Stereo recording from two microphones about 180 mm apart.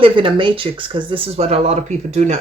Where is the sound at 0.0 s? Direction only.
30° right (ahead or behind).